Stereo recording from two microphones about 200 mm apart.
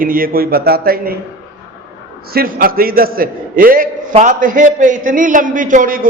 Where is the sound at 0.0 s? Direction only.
45° right (ahead or behind).